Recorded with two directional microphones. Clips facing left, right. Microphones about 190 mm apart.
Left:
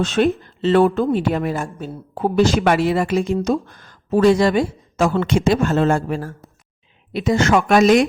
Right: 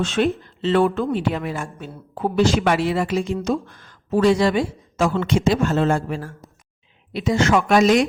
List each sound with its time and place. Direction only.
0.0 s speech: 40° left (ahead or behind); by 8.0 s 55° left (ahead or behind)